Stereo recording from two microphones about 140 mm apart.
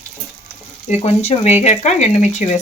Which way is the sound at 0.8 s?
55° left (ahead or behind).